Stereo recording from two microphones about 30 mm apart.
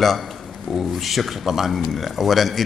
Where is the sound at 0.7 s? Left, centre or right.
Centre.